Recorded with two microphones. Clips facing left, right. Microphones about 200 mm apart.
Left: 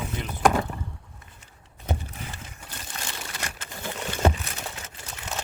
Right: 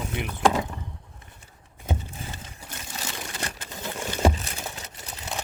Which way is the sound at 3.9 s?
10° right (ahead or behind).